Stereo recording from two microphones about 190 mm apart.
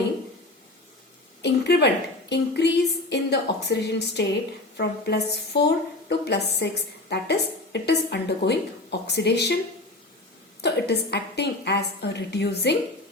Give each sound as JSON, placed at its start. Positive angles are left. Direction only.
{"t": 1.4, "sound": "a woman's voice", "side_deg": 60}
{"t": 10.6, "sound": "a woman's voice", "side_deg": 60}